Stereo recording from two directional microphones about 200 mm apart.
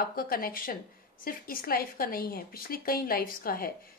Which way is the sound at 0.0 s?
45° left (ahead or behind).